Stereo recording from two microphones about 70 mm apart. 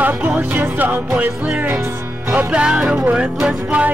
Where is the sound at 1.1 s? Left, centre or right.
Centre.